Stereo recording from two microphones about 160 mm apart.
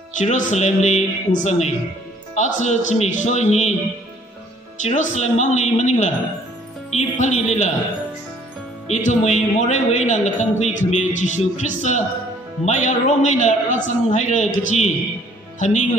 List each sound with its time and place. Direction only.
0.2 s a man's voice: 50° left (ahead or behind)
4.7 s a man's voice: 50° left (ahead or behind)
8.8 s a man's voice: 45° left (ahead or behind)